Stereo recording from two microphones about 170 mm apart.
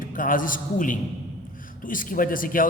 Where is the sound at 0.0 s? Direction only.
55° left (ahead or behind).